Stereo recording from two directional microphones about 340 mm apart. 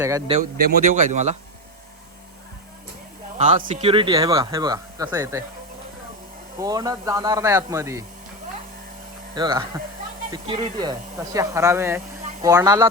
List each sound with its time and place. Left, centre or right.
0.0 s speech: centre
0.7 s speech: right
3.3 s speech: right
6.6 s speech: centre
9.3 s speech: centre